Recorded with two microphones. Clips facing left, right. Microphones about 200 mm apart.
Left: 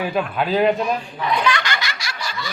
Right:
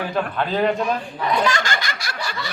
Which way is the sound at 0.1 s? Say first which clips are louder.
Left 2 dB; 10° left (ahead or behind).